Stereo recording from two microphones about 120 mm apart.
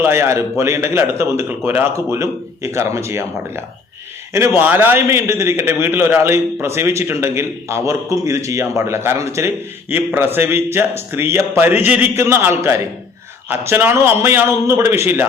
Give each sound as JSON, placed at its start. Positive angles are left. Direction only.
{"t": 0.0, "sound": "a man's voice", "side_deg": -20}